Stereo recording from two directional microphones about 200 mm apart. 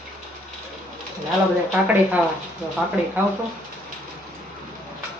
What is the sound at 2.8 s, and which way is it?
Speech, centre (ahead or behind).